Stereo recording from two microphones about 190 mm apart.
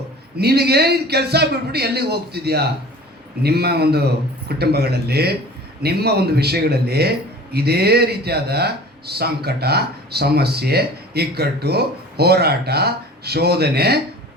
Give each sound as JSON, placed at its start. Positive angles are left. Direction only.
{"t": 0.3, "sound": "speech", "side_deg": -60}